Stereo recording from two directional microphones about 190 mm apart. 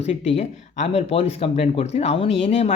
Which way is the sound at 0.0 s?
35° left (ahead or behind).